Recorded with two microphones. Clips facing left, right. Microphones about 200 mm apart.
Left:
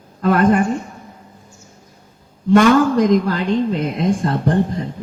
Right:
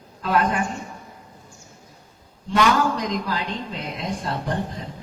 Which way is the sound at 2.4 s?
50° left (ahead or behind).